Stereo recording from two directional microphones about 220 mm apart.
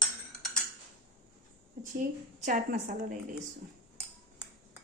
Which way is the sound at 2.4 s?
35° right (ahead or behind).